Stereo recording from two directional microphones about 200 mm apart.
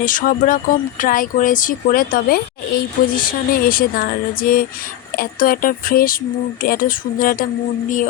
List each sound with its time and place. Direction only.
0.0 s speech: 40° left (ahead or behind)